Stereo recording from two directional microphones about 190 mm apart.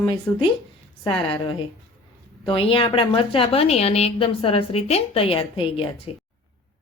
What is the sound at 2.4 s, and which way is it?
A woman's voice, 30° left (ahead or behind).